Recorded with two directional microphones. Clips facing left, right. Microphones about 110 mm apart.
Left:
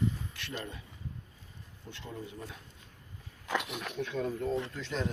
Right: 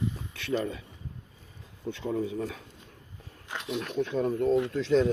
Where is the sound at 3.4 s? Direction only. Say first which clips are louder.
Left 6 dB; 90° left.